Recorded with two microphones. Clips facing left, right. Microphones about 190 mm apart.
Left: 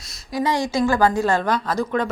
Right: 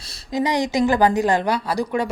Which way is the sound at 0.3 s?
20° right (ahead or behind).